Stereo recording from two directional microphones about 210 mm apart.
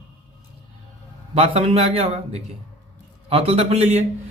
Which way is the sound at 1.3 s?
30° right (ahead or behind).